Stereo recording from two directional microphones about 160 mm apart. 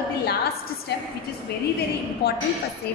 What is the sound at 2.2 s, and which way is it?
Speech, 90° left.